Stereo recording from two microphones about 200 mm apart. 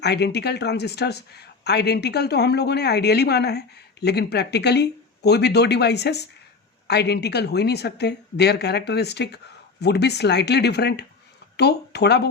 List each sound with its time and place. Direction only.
0.0 s speech: 55° left (ahead or behind)